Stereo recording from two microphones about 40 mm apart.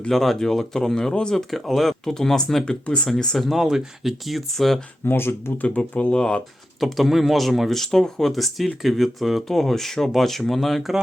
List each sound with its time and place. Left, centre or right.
0.1 s speech: centre
2.8 s speech: left
3.3 s speech: centre
3.6 s speech: centre
5.0 s speech: left
5.6 s speech: left
6.1 s speech: left
6.7 s speech: centre
7.9 s speech: centre
8.3 s speech: centre